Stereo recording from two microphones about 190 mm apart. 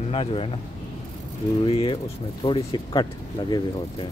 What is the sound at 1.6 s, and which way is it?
Speech, 25° left (ahead or behind).